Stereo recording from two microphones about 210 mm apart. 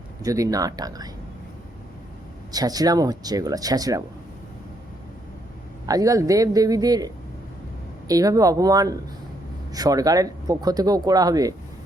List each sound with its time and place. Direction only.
0.2 s speech: 15° right (ahead or behind)
2.5 s speech: 20° right (ahead or behind)
5.8 s speech: 15° right (ahead or behind)